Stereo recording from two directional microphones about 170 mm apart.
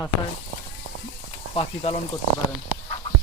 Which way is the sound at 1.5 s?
35° left (ahead or behind).